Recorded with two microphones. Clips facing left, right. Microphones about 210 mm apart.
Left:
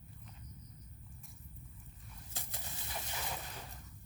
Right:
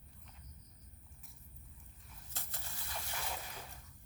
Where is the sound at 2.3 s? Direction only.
15° left (ahead or behind).